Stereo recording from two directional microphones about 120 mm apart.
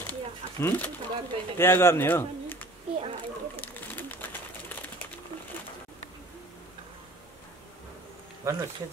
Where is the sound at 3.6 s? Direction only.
15° left (ahead or behind).